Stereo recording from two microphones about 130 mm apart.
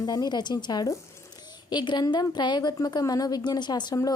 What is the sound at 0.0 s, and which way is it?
A woman's voice, 30° left (ahead or behind).